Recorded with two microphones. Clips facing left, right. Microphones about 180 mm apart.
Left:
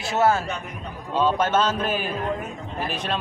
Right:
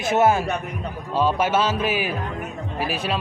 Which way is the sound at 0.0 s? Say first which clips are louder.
Right 3 dB; 20° right (ahead or behind).